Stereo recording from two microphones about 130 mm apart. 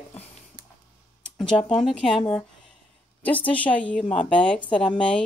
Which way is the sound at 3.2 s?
10° left (ahead or behind).